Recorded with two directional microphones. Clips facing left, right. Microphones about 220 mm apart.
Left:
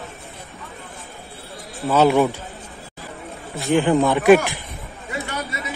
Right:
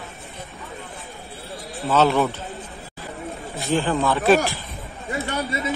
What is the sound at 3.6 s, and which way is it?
Speech, 15° left (ahead or behind).